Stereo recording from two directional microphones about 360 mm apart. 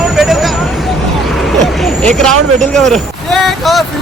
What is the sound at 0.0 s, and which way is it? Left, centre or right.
Vehicle, centre.